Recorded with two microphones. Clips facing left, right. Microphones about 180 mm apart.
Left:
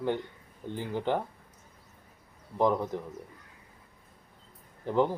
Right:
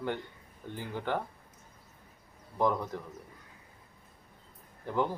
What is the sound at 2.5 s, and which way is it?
Speech, 20° left (ahead or behind).